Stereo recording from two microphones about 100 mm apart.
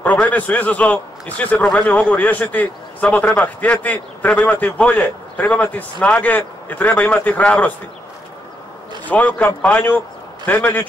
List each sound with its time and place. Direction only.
0.0 s a man's voice: 15° left (ahead or behind)
9.0 s a man's voice: 15° left (ahead or behind)